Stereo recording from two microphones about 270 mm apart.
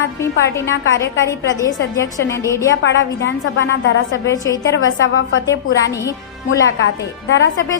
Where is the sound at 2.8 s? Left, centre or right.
Left.